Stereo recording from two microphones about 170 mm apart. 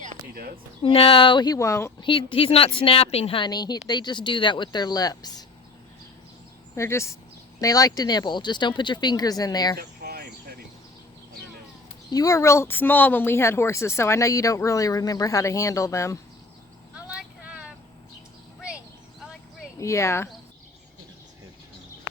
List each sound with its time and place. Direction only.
0.0 s a sound: 60° right (ahead or behind)
0.8 s speech: 35° left (ahead or behind); by 1.9 s 15° left (ahead or behind)
2.0 s speech: 30° left (ahead or behind)
6.7 s speech: 15° left (ahead or behind)
9.7 s a sound: 70° right (ahead or behind)
12.1 s speech: 20° left (ahead or behind)
16.9 s vehicle: 5° right (ahead or behind)
19.8 s speech: 15° left (ahead or behind)